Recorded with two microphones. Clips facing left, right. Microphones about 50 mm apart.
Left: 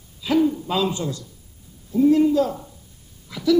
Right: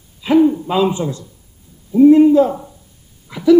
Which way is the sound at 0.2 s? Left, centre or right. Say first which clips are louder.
Right 7 dB; right.